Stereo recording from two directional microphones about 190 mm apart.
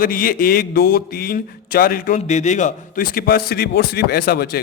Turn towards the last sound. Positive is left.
turn(degrees=55)  # may be behind; listen again after turning